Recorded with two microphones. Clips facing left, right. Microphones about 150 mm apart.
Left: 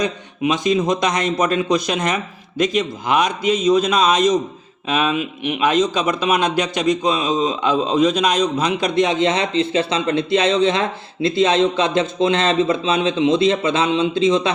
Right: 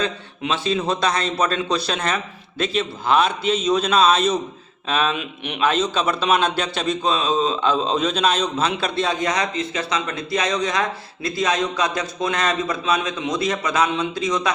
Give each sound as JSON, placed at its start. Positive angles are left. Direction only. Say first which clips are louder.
{"t": 0.0, "sound": "a man's voice", "louder": "left 5 dB", "side_deg": 15}